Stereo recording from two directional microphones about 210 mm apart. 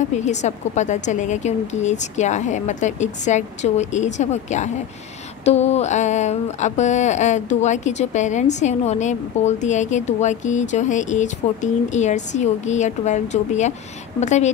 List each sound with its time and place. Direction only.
0.2 s speech: 35° left (ahead or behind)